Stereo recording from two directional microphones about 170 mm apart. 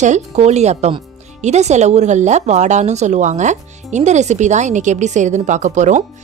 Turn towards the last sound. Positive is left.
turn(degrees=-45)  # may be behind; listen again after turning